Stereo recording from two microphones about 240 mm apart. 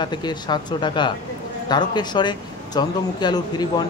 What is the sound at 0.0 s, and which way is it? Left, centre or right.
A man's voice, centre.